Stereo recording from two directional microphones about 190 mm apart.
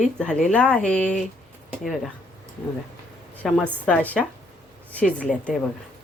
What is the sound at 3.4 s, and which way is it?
Speech, 5° left (ahead or behind).